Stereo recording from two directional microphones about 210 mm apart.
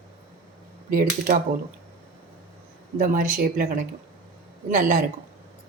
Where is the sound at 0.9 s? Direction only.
45° right (ahead or behind).